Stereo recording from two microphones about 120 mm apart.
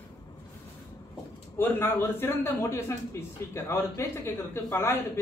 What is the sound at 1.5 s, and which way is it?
A man's voice, 15° left (ahead or behind).